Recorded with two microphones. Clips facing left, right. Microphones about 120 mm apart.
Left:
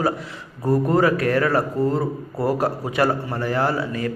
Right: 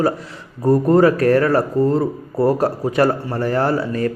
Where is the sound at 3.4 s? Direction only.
35° right (ahead or behind).